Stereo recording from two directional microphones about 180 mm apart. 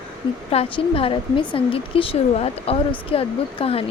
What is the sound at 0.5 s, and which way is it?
Speech, 30° left (ahead or behind).